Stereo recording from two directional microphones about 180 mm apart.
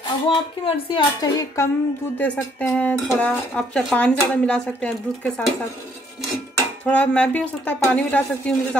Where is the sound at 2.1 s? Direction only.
10° left (ahead or behind).